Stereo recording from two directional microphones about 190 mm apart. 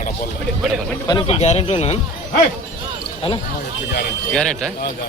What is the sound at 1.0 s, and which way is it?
Speech, 25° left (ahead or behind).